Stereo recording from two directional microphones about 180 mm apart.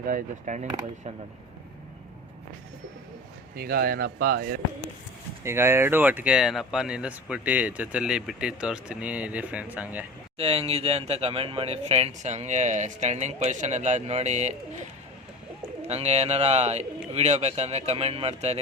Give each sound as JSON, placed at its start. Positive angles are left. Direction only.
{"t": 0.0, "sound": "speech", "side_deg": -45}
{"t": 3.5, "sound": "speech", "side_deg": -60}
{"t": 5.4, "sound": "speech", "side_deg": -15}
{"t": 10.3, "sound": "speech", "side_deg": -35}
{"t": 15.9, "sound": "speech", "side_deg": -35}